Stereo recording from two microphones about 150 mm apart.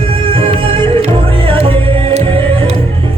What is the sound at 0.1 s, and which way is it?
Music, 35° right (ahead or behind).